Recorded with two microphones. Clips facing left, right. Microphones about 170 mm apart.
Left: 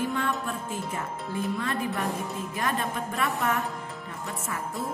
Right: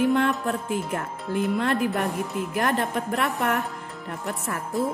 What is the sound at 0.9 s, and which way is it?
A woman's voice, 65° right (ahead or behind).